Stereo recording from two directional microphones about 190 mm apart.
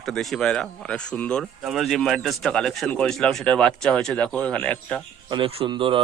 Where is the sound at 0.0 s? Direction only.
Centre (ahead or behind).